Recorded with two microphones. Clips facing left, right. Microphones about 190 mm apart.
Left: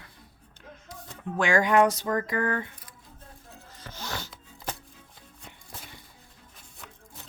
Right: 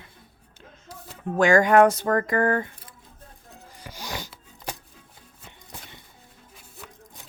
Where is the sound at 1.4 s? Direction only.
45° right (ahead or behind).